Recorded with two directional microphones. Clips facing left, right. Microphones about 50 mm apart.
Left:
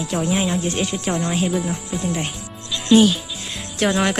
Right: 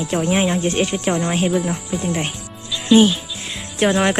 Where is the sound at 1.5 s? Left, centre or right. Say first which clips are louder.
Right 3 dB; centre.